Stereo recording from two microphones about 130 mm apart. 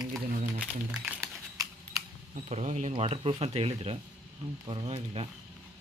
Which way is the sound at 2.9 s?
45° right (ahead or behind).